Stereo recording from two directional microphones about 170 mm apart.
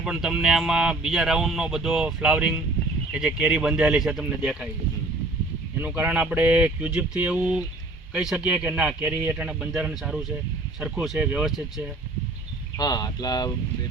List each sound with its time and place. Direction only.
0.0 s speech: 5° right (ahead or behind)
5.8 s speech: 10° right (ahead or behind)
12.7 s speech: 25° left (ahead or behind)